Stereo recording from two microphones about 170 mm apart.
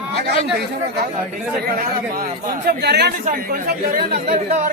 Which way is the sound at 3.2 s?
55° right (ahead or behind).